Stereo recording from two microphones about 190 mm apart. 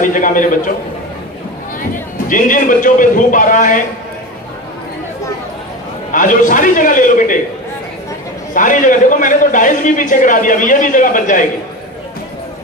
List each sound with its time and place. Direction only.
0.0 s a man's voice: 45° left (ahead or behind)
2.2 s a man's voice: 45° left (ahead or behind)
6.1 s a man's voice: 45° left (ahead or behind)
8.5 s a man's voice: 45° left (ahead or behind)